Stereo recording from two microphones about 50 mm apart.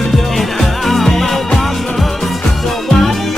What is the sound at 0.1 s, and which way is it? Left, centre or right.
Music, centre.